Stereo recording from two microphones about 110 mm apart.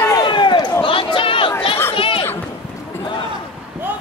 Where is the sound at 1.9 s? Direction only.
55° left (ahead or behind).